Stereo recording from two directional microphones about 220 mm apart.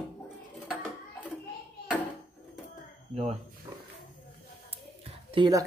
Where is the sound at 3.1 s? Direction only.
30° right (ahead or behind).